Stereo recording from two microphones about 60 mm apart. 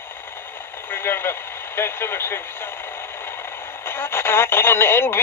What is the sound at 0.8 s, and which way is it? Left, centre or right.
Speech, left.